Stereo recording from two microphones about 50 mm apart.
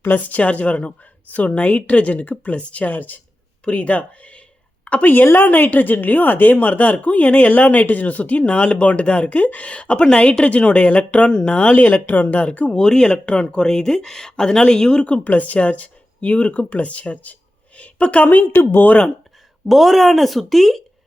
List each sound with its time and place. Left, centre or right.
0.3 s a woman's voice: left
3.6 s a woman's voice: left
12.7 s a woman's voice: centre; by 18.6 s left
19.6 s speech: centre